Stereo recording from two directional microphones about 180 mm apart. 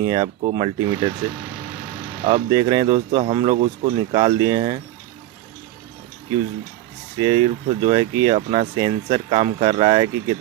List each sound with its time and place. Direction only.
0.0 s speech: 25° right (ahead or behind)
2.2 s speech: 25° right (ahead or behind)
7.2 s speech: 25° right (ahead or behind)